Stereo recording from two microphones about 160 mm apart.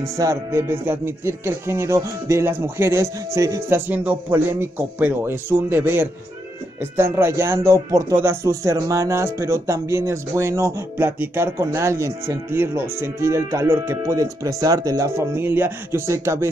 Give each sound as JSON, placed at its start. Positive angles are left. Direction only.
{"t": 0.0, "sound": "speech", "side_deg": -20}